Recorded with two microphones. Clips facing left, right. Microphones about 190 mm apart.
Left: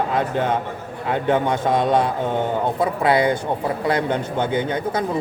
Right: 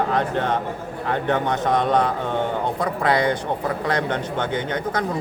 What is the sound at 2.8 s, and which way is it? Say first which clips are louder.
A man's voice: left 3 dB; 10° left (ahead or behind).